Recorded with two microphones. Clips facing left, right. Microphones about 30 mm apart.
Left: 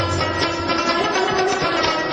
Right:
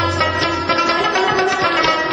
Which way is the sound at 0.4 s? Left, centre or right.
Right.